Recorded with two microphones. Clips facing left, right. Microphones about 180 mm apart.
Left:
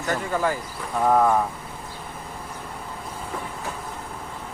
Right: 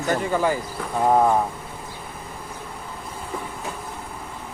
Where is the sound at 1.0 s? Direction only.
15° right (ahead or behind).